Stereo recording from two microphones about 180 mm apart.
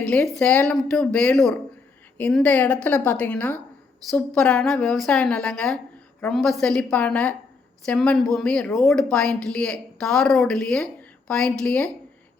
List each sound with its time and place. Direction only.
0.0 s a woman's voice: 5° left (ahead or behind)